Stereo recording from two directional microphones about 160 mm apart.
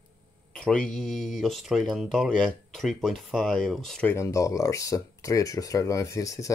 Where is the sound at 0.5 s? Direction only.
5° left (ahead or behind).